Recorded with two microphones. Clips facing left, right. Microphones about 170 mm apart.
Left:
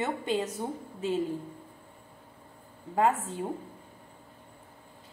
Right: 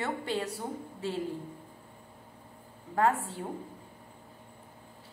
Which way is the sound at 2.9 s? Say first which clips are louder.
Left 1 dB; 20° left (ahead or behind).